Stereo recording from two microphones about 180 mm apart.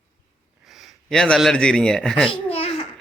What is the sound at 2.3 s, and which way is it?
Babbling, 35° left (ahead or behind).